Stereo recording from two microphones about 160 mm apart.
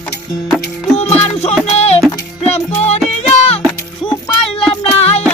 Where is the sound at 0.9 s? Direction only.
40° left (ahead or behind).